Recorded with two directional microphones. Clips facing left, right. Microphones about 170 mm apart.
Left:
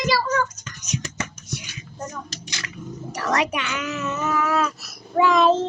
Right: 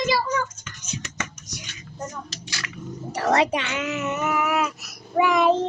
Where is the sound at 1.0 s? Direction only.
35° left (ahead or behind).